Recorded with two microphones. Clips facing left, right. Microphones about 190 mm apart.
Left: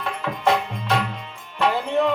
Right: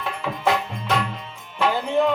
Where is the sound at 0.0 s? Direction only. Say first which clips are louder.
Left 1 dB; centre (ahead or behind).